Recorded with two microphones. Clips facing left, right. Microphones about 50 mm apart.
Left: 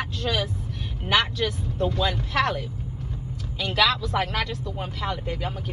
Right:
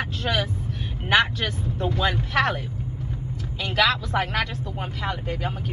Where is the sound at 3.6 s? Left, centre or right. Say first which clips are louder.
Right 1 dB; right.